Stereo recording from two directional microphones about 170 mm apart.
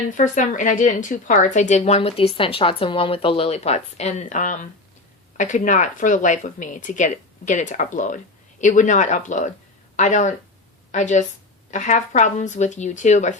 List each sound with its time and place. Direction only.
0.1 s a woman's voice: 50° left (ahead or behind)